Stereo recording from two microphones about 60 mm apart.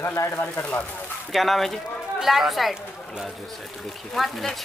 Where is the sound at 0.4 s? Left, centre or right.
Left.